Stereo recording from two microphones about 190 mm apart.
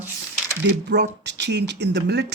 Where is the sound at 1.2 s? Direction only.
65° right (ahead or behind).